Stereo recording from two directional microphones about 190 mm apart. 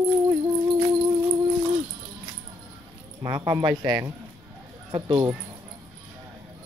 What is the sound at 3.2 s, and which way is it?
Speech, 20° right (ahead or behind).